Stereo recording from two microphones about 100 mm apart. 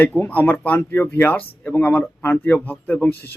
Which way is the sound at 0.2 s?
20° left (ahead or behind).